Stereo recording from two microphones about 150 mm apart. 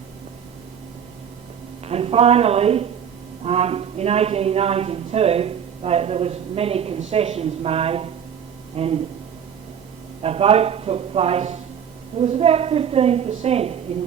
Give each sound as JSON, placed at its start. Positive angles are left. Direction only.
{"t": 1.8, "sound": "a woman's voice", "side_deg": -40}
{"t": 10.2, "sound": "a woman's voice", "side_deg": -40}